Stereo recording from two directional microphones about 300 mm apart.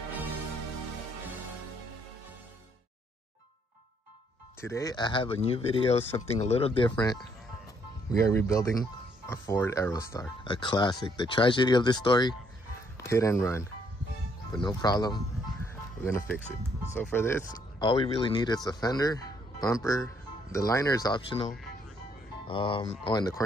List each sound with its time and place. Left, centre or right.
4.6 s speech: centre